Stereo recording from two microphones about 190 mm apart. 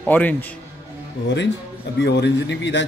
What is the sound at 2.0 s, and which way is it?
Speech, 60° left (ahead or behind).